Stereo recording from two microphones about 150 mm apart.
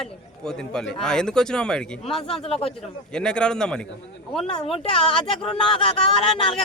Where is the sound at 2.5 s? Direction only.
40° left (ahead or behind).